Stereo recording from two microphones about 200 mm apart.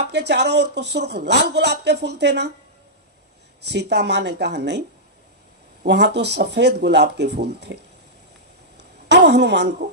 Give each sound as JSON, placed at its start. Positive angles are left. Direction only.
{"t": 0.0, "sound": "speech", "side_deg": -55}
{"t": 3.6, "sound": "speech", "side_deg": -55}
{"t": 5.8, "sound": "speech", "side_deg": -55}
{"t": 8.8, "sound": "a sound", "side_deg": -60}